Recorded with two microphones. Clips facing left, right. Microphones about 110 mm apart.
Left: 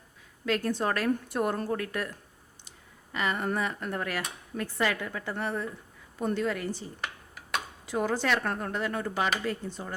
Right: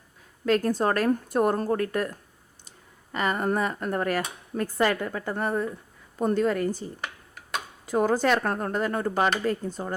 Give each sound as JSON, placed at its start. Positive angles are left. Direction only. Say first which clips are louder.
{"t": 0.4, "sound": "a woman's voice", "louder": "right 5 dB", "side_deg": -40}
{"t": 7.0, "sound": "computer keyboard", "louder": "right 1 dB", "side_deg": 0}
{"t": 7.9, "sound": "speech", "louder": "right 6 dB", "side_deg": -45}